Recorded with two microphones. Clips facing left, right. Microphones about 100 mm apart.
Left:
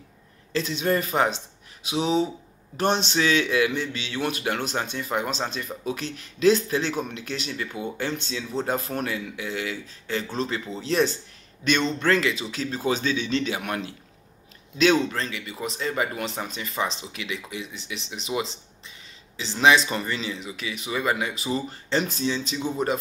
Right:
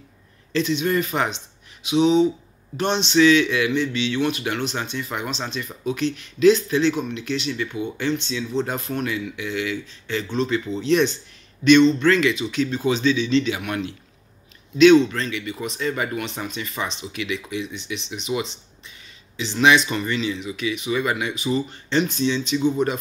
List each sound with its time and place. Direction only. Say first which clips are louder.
0.5 s a man's voice: right 3 dB; 40° left (ahead or behind)